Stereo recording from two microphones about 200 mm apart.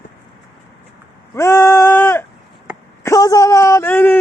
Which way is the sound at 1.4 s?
15° left (ahead or behind).